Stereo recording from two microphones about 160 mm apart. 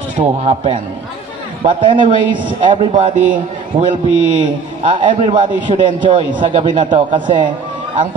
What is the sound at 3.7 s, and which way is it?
A man's voice, 35° right (ahead or behind).